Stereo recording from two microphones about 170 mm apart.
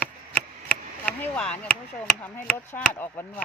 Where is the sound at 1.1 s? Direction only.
5° left (ahead or behind).